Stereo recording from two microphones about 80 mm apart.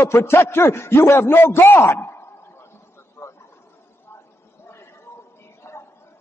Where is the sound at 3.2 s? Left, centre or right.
Left.